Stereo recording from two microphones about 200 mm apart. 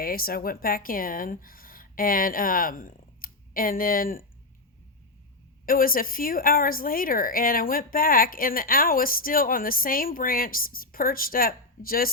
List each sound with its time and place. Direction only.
0.0 s a woman's voice: 50° left (ahead or behind)
5.6 s a woman's voice: 45° left (ahead or behind)